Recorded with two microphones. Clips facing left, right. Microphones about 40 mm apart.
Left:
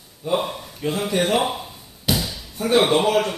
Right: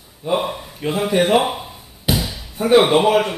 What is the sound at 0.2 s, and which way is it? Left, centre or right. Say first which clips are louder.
Speech: right 2 dB; centre.